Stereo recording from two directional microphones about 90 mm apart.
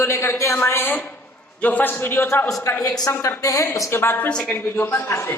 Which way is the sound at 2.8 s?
40° left (ahead or behind).